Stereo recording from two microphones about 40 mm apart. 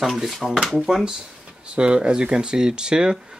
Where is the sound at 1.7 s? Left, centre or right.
Right.